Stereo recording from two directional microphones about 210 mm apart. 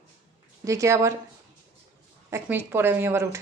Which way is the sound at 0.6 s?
15° right (ahead or behind).